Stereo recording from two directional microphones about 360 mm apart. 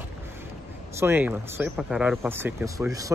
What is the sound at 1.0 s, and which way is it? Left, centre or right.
Speech, centre.